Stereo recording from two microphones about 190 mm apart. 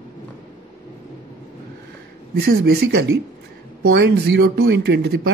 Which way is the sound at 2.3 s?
55° right (ahead or behind).